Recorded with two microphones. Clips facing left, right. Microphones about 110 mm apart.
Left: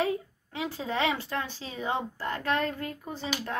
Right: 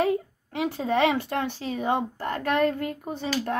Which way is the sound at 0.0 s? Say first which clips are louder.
Right 5 dB; 60° right (ahead or behind).